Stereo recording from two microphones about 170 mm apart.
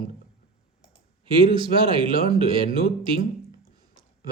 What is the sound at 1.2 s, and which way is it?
A man's voice, 30° right (ahead or behind).